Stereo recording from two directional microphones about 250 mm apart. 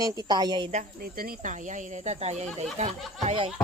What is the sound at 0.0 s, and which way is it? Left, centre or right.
Speech, centre.